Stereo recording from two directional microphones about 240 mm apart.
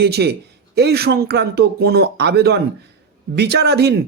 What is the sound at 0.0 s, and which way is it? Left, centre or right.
Speech, right.